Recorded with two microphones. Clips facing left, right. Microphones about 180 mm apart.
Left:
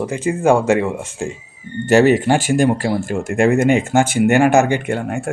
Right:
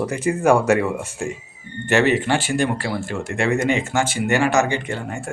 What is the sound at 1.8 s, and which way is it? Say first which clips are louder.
Speech: left 6 dB; 40° left (ahead or behind).